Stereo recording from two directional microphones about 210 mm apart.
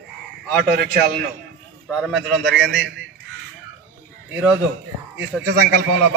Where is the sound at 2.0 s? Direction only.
Centre (ahead or behind).